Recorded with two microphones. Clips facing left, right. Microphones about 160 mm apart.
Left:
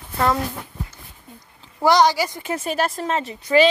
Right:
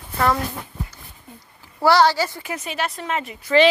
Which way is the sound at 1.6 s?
15° left (ahead or behind).